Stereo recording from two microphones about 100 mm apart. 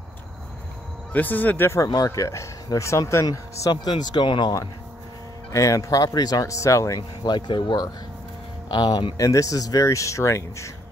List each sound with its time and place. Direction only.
1.1 s speech: 15° left (ahead or behind)
1.8 s speech: 40° left (ahead or behind)
2.0 s speech: 30° left (ahead or behind)
3.3 s speech: 45° left (ahead or behind)
5.5 s speech: 30° left (ahead or behind)
7.0 s speech: 50° left (ahead or behind)
9.1 s speech: 35° left (ahead or behind)